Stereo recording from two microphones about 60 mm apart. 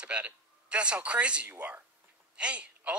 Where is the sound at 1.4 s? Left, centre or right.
Right.